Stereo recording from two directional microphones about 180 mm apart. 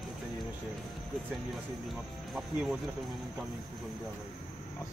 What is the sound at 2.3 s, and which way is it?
Speech, 5° right (ahead or behind).